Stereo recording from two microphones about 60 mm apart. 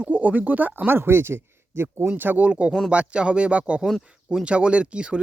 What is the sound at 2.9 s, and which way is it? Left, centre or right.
Speech, centre.